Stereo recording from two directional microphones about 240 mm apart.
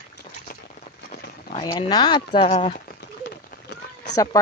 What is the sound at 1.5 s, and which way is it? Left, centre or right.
Speech, centre.